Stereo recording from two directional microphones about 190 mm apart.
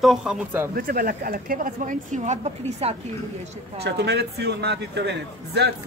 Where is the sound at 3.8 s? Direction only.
60° right (ahead or behind).